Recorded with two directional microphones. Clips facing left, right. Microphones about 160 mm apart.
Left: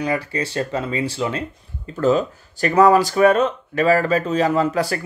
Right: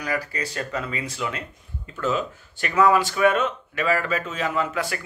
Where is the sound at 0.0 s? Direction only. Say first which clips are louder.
Left 5 dB; 25° left (ahead or behind).